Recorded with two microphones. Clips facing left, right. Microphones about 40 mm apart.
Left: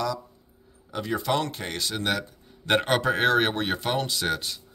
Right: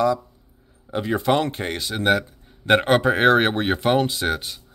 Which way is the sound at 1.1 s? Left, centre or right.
Right.